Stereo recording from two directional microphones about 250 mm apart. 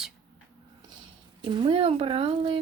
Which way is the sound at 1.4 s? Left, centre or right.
Centre.